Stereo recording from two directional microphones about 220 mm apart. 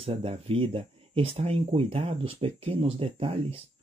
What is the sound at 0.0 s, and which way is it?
Speech, 25° right (ahead or behind).